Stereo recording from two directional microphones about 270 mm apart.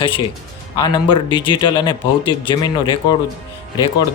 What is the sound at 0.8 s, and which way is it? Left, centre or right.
A man's voice, centre.